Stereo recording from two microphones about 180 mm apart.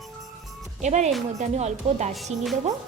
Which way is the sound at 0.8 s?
40° right (ahead or behind).